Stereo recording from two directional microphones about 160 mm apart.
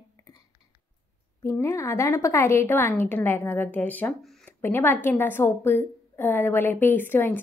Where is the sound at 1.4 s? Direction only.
15° left (ahead or behind).